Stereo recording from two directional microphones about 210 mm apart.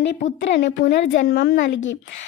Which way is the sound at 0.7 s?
55° left (ahead or behind).